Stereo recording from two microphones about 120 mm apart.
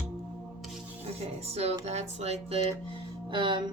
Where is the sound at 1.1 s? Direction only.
60° right (ahead or behind).